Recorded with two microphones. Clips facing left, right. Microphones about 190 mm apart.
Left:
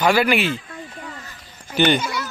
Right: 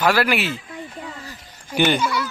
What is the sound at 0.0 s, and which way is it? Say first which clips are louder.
Speech: left 2 dB; centre (ahead or behind).